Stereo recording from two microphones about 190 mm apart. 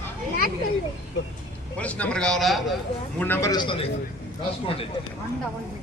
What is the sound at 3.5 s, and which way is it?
Speech, 25° left (ahead or behind).